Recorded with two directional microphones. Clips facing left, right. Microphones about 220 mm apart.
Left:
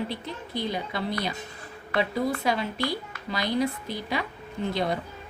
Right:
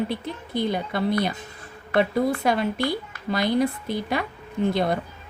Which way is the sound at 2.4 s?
55° right (ahead or behind).